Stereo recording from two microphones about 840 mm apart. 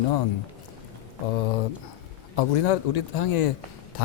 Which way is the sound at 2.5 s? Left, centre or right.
Left.